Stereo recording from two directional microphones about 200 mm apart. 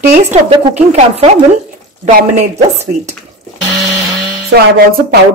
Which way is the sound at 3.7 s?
Centre (ahead or behind).